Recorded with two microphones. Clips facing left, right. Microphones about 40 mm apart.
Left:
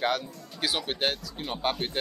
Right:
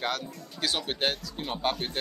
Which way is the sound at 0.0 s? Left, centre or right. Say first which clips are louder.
Left 4 dB; centre.